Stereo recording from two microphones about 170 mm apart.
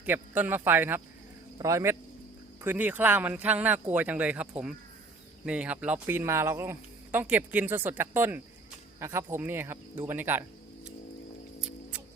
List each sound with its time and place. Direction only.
0.0 s speech: 10° right (ahead or behind)